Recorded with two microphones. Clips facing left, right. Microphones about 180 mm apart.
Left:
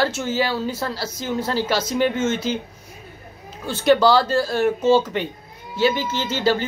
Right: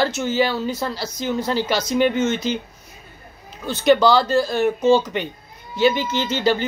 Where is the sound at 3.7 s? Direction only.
10° left (ahead or behind).